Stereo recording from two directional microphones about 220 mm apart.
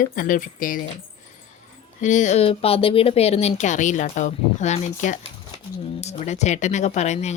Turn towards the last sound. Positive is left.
turn(degrees=30)  # may be behind; listen again after turning